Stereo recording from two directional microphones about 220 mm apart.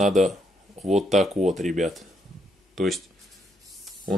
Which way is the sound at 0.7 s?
30° right (ahead or behind).